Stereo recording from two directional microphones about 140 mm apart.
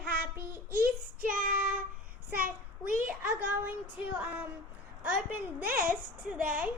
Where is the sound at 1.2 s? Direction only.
90° right.